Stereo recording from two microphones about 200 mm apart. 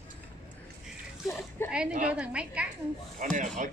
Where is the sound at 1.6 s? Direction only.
10° left (ahead or behind).